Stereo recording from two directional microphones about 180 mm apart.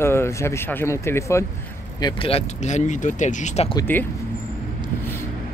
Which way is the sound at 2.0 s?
30° left (ahead or behind).